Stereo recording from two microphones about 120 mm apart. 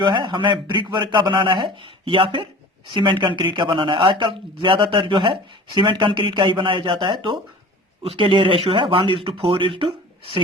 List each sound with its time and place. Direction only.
0.0 s speech: 40° right (ahead or behind)